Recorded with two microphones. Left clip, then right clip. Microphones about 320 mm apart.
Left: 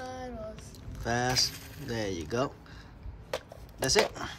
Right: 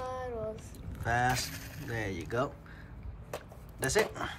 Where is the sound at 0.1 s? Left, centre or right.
Centre.